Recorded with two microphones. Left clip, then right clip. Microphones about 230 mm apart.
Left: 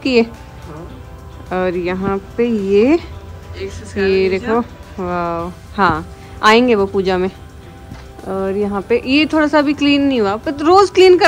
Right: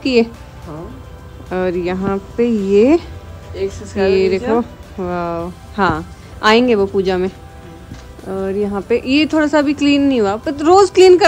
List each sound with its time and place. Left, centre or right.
0.0 s a woman's voice: centre
1.5 s speech: centre
3.5 s speech: right
4.0 s speech: centre